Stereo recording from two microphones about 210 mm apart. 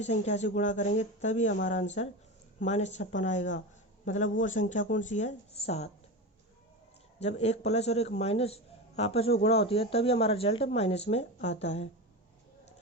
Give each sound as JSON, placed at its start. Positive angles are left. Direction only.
{"t": 0.0, "sound": "speech", "side_deg": 35}
{"t": 7.2, "sound": "a man's voice", "side_deg": 30}